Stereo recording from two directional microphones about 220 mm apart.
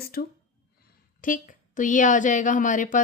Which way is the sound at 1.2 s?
35° left (ahead or behind).